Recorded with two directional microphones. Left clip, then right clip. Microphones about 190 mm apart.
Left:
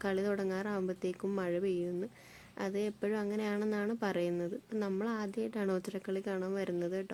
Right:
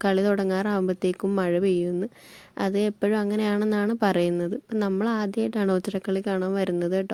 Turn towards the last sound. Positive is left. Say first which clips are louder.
# right 11 dB
turn(degrees=-40)  # may be behind; listen again after turning